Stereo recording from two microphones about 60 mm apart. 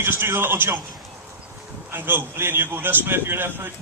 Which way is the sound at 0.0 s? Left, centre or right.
Right.